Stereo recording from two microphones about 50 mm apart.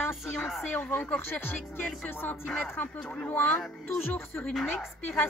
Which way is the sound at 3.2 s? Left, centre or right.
Left.